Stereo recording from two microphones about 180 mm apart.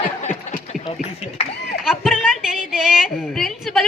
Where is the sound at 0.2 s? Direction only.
40° left (ahead or behind).